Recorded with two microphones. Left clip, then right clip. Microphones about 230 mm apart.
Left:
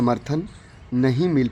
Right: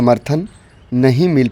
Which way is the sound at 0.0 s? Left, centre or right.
Right.